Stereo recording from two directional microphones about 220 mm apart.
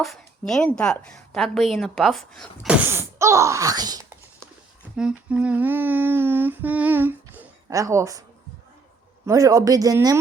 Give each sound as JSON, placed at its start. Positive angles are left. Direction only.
{"t": 0.0, "sound": "a woman's voice", "side_deg": 0}
{"t": 4.9, "sound": "humming", "side_deg": -5}
{"t": 9.2, "sound": "humming", "side_deg": -15}